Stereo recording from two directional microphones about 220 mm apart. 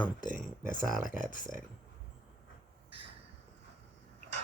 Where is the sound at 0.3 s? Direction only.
40° left (ahead or behind).